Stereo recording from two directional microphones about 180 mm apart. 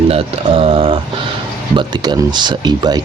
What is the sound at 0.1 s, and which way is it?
Speech, 30° right (ahead or behind).